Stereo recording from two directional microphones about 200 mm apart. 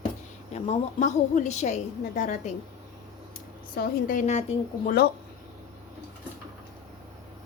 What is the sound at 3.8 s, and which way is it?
Speech, 45° left (ahead or behind).